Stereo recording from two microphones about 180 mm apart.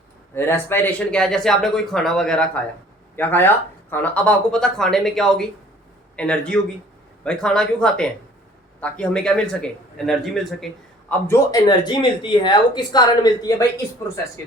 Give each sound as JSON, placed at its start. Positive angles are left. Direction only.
{"t": 0.3, "sound": "speech", "side_deg": 15}
{"t": 11.3, "sound": "speech", "side_deg": 20}